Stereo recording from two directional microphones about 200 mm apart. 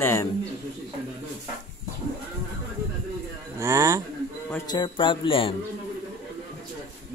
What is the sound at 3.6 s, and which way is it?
Speech, 15° right (ahead or behind).